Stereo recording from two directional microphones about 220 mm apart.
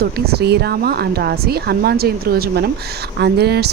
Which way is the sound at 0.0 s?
45° right (ahead or behind).